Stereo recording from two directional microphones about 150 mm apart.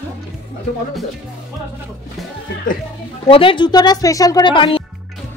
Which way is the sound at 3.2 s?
35° left (ahead or behind).